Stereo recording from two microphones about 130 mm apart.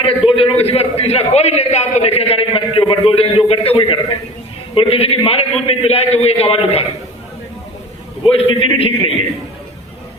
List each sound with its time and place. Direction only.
0.3 s a man's voice: 45° left (ahead or behind)
8.4 s a man's voice: 45° left (ahead or behind)